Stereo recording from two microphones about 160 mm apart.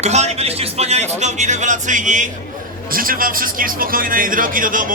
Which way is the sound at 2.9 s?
60° right (ahead or behind).